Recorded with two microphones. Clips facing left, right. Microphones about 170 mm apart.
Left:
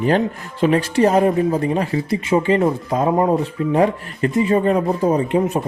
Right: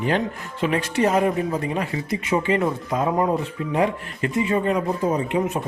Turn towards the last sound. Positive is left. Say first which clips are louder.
# left 5 dB
turn(degrees=35)  # may be behind; listen again after turning